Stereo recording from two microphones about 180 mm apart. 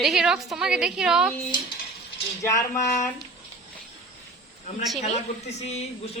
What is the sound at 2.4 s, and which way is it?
Speech, 15° left (ahead or behind).